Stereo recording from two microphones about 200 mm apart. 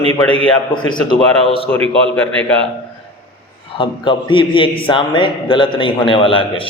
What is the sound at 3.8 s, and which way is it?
A man's voice, 25° left (ahead or behind).